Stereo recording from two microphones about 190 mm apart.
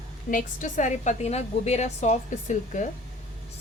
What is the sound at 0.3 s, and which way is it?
A woman's voice, 45° left (ahead or behind).